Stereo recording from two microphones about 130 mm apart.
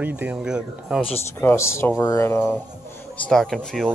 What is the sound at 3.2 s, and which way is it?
Speech, 5° left (ahead or behind).